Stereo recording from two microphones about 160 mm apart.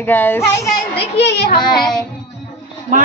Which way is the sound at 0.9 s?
90° left.